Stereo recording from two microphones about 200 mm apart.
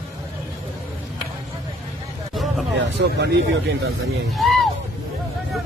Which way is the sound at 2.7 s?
55° right (ahead or behind).